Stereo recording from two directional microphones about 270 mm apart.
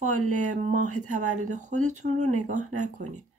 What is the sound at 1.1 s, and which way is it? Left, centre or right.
Speech, right.